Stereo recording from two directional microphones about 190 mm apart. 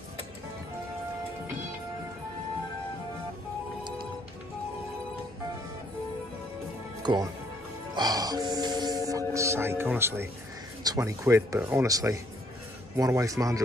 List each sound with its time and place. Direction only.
7.0 s music: 20° right (ahead or behind)
9.3 s speech: 15° right (ahead or behind)